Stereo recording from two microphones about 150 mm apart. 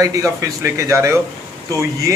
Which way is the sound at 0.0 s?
20° right (ahead or behind).